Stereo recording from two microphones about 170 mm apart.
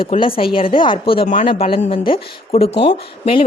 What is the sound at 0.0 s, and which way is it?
A woman's voice, 30° left (ahead or behind).